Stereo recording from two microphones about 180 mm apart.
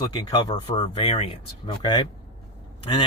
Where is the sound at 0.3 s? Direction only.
25° left (ahead or behind).